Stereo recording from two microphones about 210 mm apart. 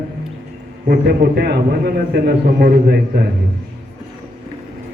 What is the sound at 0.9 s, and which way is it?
A man's voice, 50° right (ahead or behind).